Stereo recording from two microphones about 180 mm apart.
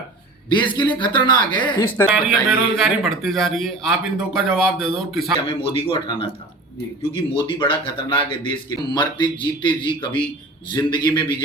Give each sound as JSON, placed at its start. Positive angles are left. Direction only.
{"t": 0.5, "sound": "a man's voice", "side_deg": 25}
{"t": 2.7, "sound": "speech", "side_deg": 0}
{"t": 5.5, "sound": "a man's voice", "side_deg": 30}